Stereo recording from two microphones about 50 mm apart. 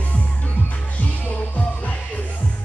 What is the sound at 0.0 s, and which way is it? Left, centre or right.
Music, left.